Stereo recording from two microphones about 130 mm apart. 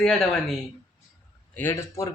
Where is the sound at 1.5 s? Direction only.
15° left (ahead or behind).